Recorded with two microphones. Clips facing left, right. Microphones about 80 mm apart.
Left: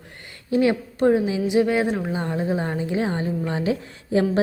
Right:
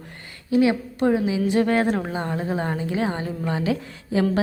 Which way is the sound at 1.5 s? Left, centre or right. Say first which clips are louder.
Left 1 dB; right.